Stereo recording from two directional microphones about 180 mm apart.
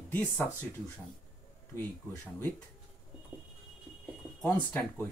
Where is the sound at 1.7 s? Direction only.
15° left (ahead or behind).